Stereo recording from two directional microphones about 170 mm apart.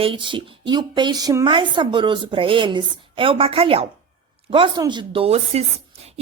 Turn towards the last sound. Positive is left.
turn(degrees=-35)  # may be behind; listen again after turning